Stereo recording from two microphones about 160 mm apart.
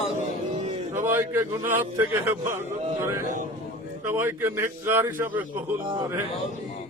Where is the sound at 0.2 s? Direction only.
45° right (ahead or behind).